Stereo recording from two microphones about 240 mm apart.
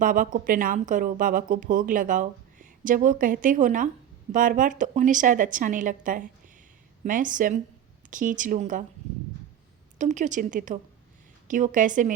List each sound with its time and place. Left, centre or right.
0.0 s speech: right
10.0 s speech: right